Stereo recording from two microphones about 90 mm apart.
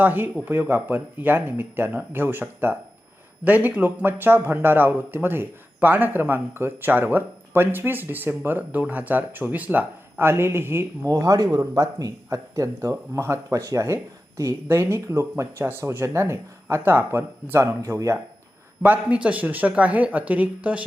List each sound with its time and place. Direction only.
0.0 s speech: 20° right (ahead or behind)
11.0 s speech: 40° right (ahead or behind)
18.8 s speech: 15° right (ahead or behind)